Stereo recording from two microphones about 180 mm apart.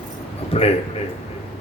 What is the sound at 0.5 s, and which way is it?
Speech, 35° left (ahead or behind).